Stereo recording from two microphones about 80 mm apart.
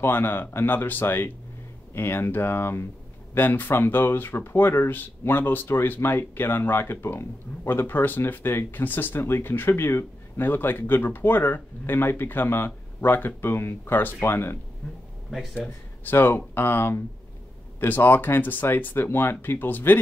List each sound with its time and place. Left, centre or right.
0.0 s speech: left
16.0 s speech: left